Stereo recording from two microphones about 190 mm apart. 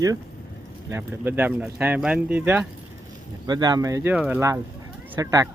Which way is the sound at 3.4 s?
20° right (ahead or behind).